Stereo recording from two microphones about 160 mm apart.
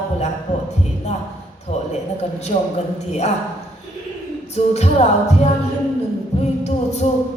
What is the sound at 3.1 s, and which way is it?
Speech, 45° left (ahead or behind).